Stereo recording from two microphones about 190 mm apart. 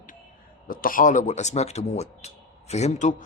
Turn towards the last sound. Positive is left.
turn(degrees=35)  # may be behind; listen again after turning